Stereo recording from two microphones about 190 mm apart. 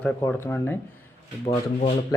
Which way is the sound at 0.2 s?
10° left (ahead or behind).